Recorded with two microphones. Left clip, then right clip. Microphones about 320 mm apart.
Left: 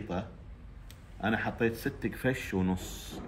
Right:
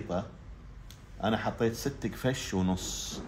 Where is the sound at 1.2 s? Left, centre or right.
Centre.